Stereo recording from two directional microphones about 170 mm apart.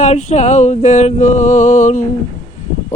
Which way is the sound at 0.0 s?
40° left (ahead or behind).